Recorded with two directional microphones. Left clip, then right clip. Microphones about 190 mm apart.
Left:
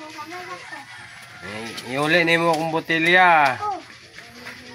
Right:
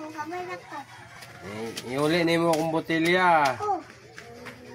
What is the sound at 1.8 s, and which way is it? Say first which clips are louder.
Speech: left 6 dB; 30° left (ahead or behind).